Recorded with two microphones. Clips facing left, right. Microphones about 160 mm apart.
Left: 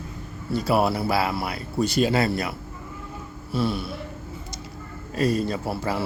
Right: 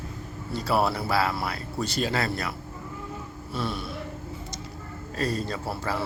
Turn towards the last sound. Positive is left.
turn(degrees=10)  # may be behind; listen again after turning